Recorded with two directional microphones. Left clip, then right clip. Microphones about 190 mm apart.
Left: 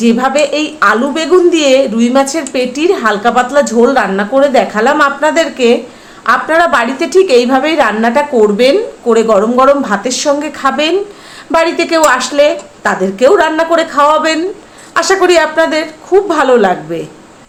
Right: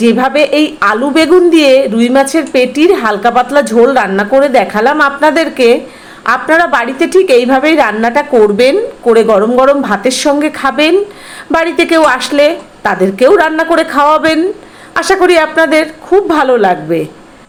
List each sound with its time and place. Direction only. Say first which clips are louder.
0.0 s a woman's voice: right 2 dB; 15° right (ahead or behind)